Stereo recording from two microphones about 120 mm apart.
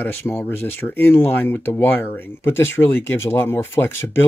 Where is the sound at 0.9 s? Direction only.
15° left (ahead or behind).